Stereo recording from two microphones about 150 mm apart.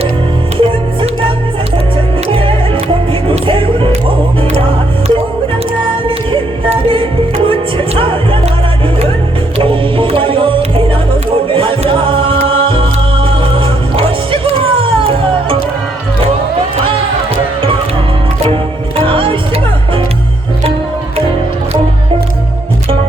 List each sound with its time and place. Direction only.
0.5 s music: 45° right (ahead or behind)
2.2 s music: 35° right (ahead or behind)
5.8 s music: 35° right (ahead or behind)
9.6 s music: 35° right (ahead or behind)
11.4 s a capella: 35° right (ahead or behind)
18.5 s music: 35° right (ahead or behind)